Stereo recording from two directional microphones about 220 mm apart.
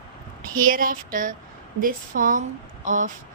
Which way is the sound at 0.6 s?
40° right (ahead or behind).